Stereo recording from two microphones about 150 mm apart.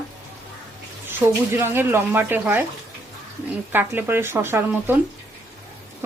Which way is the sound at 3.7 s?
15° right (ahead or behind).